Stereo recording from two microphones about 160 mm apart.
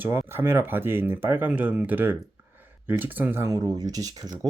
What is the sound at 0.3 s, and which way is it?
Speech, 15° right (ahead or behind).